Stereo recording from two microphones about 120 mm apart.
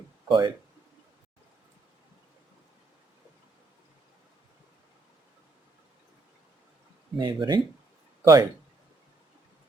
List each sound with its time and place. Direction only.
0.3 s speech: 40° right (ahead or behind)
7.2 s speech: 40° right (ahead or behind)
8.2 s speech: 30° right (ahead or behind)